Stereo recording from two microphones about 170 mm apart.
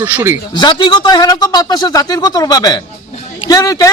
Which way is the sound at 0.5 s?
25° left (ahead or behind).